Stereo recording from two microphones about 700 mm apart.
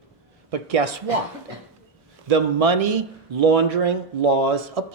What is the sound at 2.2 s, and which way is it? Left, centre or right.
Speech, right.